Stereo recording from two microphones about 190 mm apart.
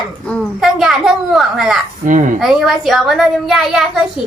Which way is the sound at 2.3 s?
Centre (ahead or behind).